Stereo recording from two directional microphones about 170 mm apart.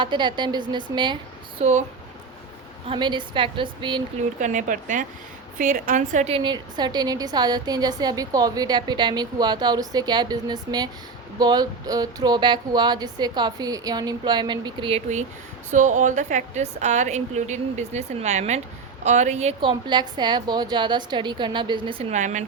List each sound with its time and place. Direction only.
0.0 s a woman's voice: 25° right (ahead or behind)
2.8 s a woman's voice: 30° right (ahead or behind)
4.2 s a woman's voice: 45° right (ahead or behind)
15.7 s a woman's voice: 45° right (ahead or behind)
19.9 s a woman's voice: 25° right (ahead or behind)
22.1 s a woman's voice: 45° right (ahead or behind)